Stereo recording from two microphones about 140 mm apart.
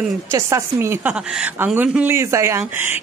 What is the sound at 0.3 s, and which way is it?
A woman's voice, 20° right (ahead or behind).